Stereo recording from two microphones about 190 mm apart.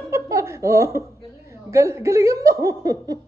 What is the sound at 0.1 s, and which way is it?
Giggle, 15° right (ahead or behind).